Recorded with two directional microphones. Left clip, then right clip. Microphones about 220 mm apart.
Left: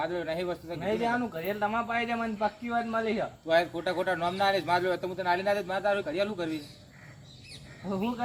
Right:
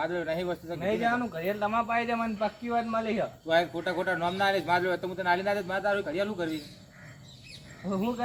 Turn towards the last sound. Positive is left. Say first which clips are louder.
# right 1 dB
turn(degrees=-10)  # may be behind; listen again after turning